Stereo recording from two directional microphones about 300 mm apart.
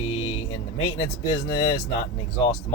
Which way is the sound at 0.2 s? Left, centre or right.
Left.